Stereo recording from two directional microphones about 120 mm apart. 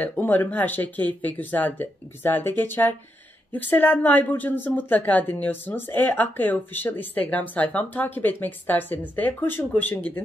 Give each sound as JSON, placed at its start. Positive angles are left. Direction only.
{"t": 0.0, "sound": "speech", "side_deg": 15}